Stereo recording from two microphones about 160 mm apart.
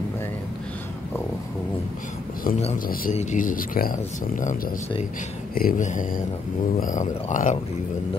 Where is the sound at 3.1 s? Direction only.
55° left (ahead or behind).